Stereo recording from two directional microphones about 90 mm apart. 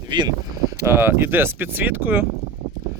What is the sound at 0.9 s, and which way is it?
Speech, 25° right (ahead or behind).